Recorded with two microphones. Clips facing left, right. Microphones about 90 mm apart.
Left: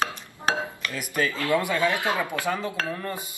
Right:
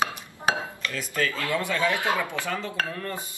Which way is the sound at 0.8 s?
15° left (ahead or behind).